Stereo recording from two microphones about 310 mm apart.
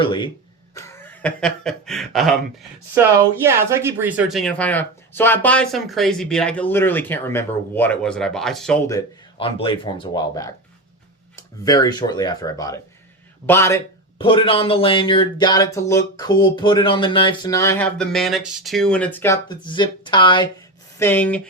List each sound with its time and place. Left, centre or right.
0.0 s speech: centre